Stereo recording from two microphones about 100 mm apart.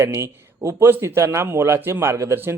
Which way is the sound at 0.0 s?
25° right (ahead or behind).